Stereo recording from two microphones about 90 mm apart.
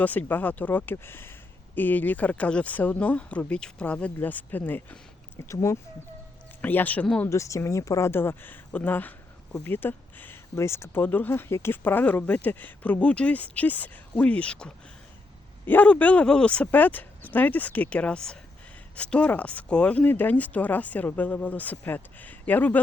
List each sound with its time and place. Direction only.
0.0 s speech: 20° left (ahead or behind)
5.4 s speech: 35° left (ahead or behind)
6.6 s speech: 20° left (ahead or behind)
7.3 s speech: 35° left (ahead or behind)